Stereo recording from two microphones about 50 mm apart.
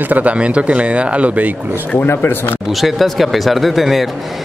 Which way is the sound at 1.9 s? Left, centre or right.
Left.